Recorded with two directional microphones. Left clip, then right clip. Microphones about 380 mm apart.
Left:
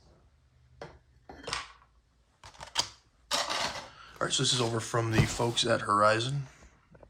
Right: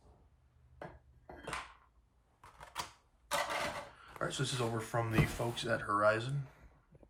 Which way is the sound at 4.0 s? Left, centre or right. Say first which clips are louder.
Left 11 dB; centre.